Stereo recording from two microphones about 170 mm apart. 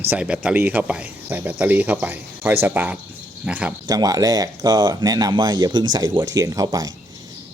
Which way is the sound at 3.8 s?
20° right (ahead or behind).